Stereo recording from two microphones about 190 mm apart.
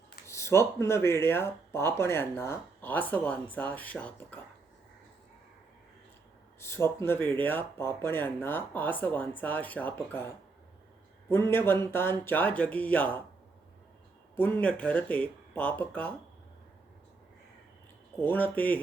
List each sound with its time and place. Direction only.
0.3 s speech: 15° left (ahead or behind)
6.6 s speech: 15° left (ahead or behind)
14.3 s speech: 10° left (ahead or behind)
18.2 s speech: 10° left (ahead or behind)